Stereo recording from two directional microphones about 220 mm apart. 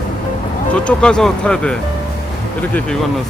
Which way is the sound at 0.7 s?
5° left (ahead or behind).